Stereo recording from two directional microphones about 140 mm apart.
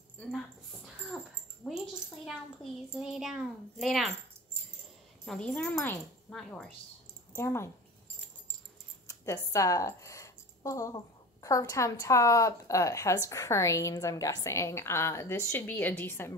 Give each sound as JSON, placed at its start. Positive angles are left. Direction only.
{"t": 1.7, "sound": "a child's voice", "side_deg": -5}
{"t": 5.2, "sound": "speech", "side_deg": 5}
{"t": 7.3, "sound": "a woman's voice", "side_deg": 20}
{"t": 9.0, "sound": "a sound", "side_deg": 20}
{"t": 11.4, "sound": "a woman's voice", "side_deg": 20}